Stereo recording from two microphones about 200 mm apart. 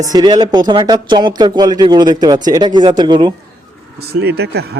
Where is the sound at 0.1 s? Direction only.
20° right (ahead or behind).